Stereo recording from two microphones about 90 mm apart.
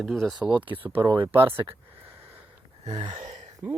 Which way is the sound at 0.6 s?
20° right (ahead or behind).